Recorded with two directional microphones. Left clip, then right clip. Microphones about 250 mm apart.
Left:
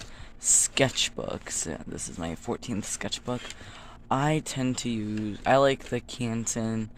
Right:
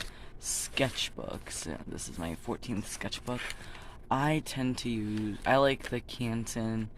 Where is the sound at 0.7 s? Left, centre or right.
Centre.